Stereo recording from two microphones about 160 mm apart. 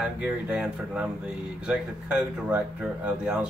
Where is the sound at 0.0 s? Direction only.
5° right (ahead or behind).